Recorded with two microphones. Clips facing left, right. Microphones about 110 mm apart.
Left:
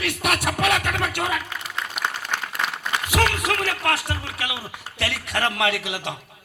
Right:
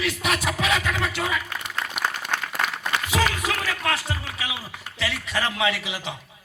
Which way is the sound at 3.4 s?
70° left (ahead or behind).